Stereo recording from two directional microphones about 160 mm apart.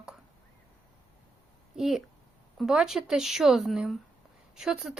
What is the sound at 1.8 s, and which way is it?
Speech, centre (ahead or behind).